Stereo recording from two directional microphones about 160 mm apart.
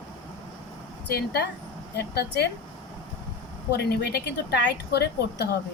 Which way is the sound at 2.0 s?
90° left.